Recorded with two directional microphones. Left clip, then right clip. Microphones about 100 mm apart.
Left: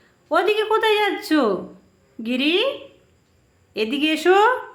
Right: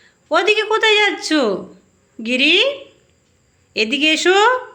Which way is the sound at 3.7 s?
10° right (ahead or behind).